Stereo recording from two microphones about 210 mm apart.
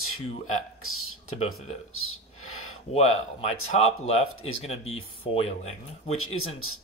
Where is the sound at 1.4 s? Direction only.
80° left.